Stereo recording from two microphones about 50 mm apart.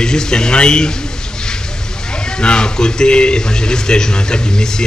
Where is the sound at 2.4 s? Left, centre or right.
Centre.